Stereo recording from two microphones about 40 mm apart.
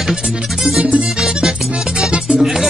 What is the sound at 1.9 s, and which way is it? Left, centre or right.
Music, right.